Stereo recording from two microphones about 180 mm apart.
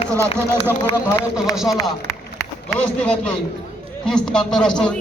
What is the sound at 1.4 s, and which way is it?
Speech, centre (ahead or behind).